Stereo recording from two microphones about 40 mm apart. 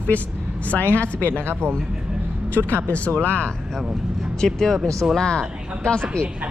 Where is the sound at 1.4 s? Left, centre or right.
Right.